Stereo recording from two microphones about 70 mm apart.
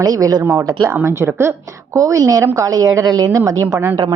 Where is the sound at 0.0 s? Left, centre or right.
Right.